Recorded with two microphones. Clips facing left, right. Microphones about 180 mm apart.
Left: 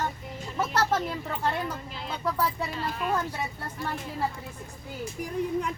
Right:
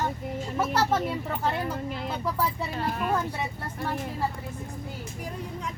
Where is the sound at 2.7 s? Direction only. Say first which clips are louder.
Right 2 dB; 55° right (ahead or behind).